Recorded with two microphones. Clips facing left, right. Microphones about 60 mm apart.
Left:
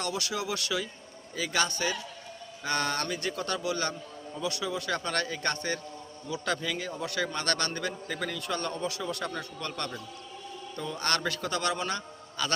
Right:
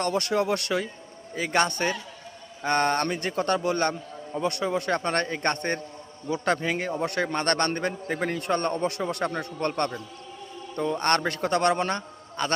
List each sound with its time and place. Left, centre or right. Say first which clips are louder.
0.0 s a man's voice: right 8 dB; right
2.6 s a man's voice: right 7 dB; right
10.9 s a man's voice: right 5 dB; right